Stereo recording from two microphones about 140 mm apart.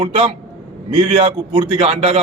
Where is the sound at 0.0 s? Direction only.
40° right (ahead or behind).